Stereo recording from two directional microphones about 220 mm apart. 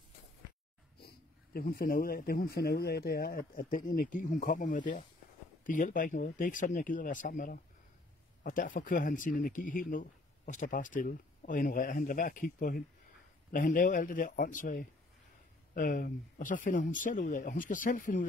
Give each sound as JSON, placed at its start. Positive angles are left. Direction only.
{"t": 0.9, "sound": "speech", "side_deg": 45}